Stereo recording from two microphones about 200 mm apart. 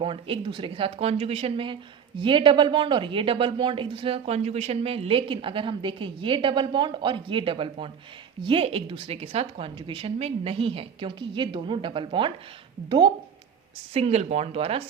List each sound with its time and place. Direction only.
0.0 s speech: 25° right (ahead or behind)